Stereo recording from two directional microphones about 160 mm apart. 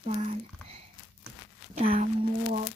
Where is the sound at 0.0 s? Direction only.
40° right (ahead or behind).